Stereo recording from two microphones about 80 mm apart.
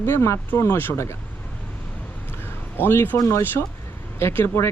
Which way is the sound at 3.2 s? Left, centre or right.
Left.